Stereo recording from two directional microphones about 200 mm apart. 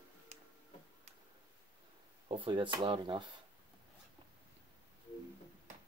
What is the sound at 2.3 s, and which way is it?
Speech, 25° right (ahead or behind).